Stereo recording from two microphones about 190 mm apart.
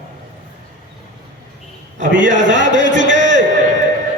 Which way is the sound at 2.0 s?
70° right (ahead or behind).